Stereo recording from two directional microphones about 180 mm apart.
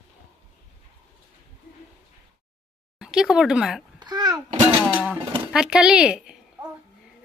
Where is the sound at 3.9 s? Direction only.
25° right (ahead or behind).